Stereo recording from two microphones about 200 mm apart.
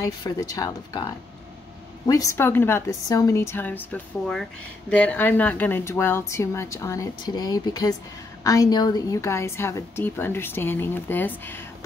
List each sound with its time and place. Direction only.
0.0 s a woman's voice: 20° left (ahead or behind)